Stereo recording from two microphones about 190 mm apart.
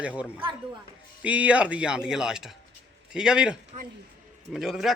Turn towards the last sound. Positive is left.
turn(degrees=0)  # may be behind; listen again after turning